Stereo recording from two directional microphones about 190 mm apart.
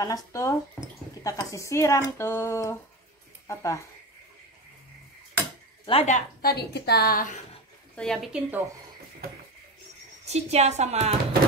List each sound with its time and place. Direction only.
0.0 s speech: 15° left (ahead or behind)
5.9 s a woman's voice: 35° left (ahead or behind)
6.4 s a woman's voice: 60° left (ahead or behind)
7.9 s speech: 5° left (ahead or behind)
10.2 s speech: 35° right (ahead or behind)